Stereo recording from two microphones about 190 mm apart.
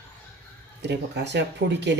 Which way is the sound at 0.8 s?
65° right (ahead or behind).